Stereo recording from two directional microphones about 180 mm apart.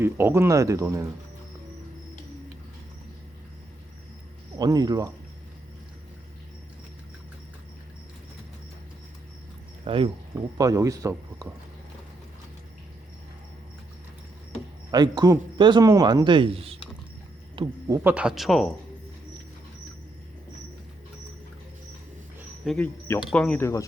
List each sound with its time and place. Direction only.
0.0 s speech: 15° right (ahead or behind)
4.5 s a man's voice: 20° right (ahead or behind)
9.8 s speech: 30° right (ahead or behind)
10.6 s a man's voice: 20° right (ahead or behind)
14.8 s a man's voice: 25° right (ahead or behind); by 18.7 s centre (ahead or behind)
22.6 s speech: centre (ahead or behind)